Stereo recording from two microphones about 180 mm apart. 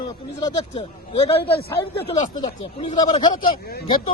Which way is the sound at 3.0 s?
25° left (ahead or behind).